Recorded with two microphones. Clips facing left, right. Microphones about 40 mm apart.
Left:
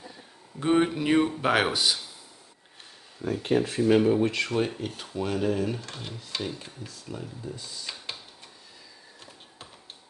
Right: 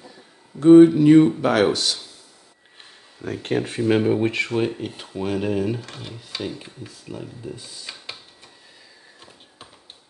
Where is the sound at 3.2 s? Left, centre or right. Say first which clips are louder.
Right 1 dB; right.